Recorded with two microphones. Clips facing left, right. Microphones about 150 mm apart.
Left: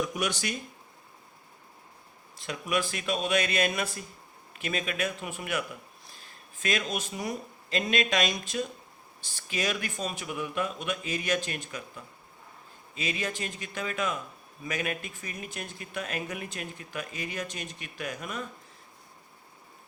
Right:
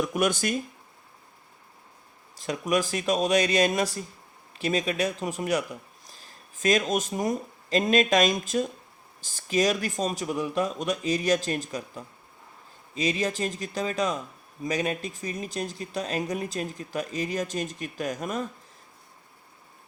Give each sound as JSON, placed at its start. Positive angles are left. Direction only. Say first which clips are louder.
{"t": 0.1, "sound": "speech", "louder": "right 6 dB", "side_deg": -50}
{"t": 2.4, "sound": "speech", "louder": "right 5 dB", "side_deg": -40}